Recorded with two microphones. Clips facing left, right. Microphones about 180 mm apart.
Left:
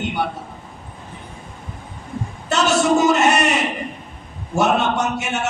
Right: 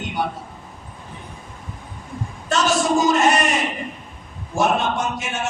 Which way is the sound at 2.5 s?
65° left (ahead or behind).